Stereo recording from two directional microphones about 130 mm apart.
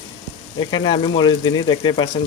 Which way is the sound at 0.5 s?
35° left (ahead or behind).